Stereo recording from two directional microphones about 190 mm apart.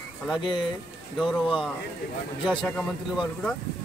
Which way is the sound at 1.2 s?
Centre (ahead or behind).